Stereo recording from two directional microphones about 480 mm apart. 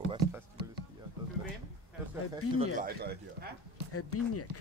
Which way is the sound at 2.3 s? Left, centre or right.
Centre.